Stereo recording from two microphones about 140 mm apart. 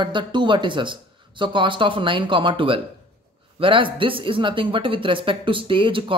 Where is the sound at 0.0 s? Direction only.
35° right (ahead or behind).